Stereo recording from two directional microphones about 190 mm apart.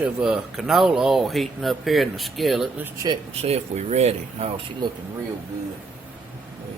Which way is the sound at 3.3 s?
35° right (ahead or behind).